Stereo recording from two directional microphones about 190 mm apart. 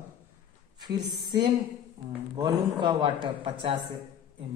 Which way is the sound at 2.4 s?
25° right (ahead or behind).